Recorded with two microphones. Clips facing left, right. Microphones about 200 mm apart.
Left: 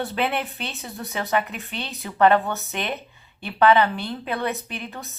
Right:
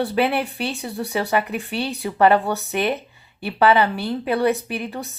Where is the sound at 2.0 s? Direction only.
10° right (ahead or behind).